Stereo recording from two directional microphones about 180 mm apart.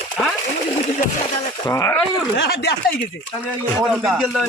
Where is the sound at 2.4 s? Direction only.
70° left (ahead or behind).